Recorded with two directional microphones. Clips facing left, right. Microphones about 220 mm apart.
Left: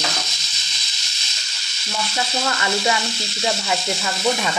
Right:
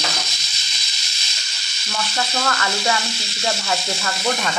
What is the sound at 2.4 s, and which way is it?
Speech, 15° left (ahead or behind).